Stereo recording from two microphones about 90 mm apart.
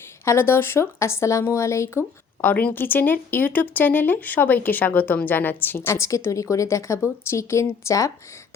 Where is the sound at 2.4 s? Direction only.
15° left (ahead or behind).